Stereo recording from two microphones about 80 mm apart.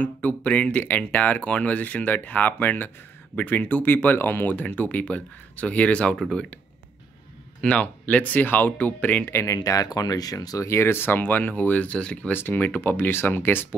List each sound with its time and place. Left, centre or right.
0.0 s speech: centre
7.6 s speech: centre
9.3 s speech: left
9.6 s speech: left
10.7 s speech: left